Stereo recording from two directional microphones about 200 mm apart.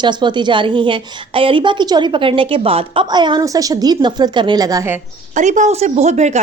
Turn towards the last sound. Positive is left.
turn(degrees=-35)  # may be behind; listen again after turning